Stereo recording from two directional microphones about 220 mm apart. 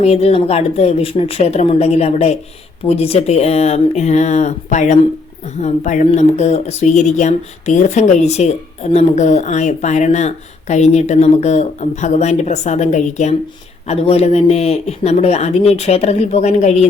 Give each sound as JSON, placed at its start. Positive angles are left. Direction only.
{"t": 0.0, "sound": "speech", "side_deg": 30}